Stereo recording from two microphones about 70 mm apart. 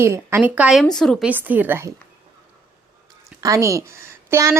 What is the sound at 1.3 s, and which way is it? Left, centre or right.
Speech, right.